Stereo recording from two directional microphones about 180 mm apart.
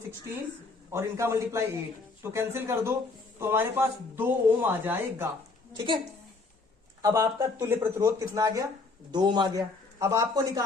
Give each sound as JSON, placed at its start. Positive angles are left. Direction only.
{"t": 0.9, "sound": "a man's voice", "side_deg": -15}
{"t": 5.7, "sound": "a man's voice", "side_deg": -25}
{"t": 7.0, "sound": "a man's voice", "side_deg": -15}